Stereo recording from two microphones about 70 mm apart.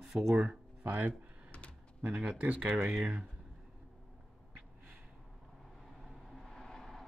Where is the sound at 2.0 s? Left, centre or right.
Right.